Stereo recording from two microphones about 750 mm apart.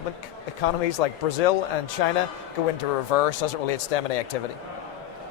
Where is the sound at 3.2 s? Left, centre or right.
Left.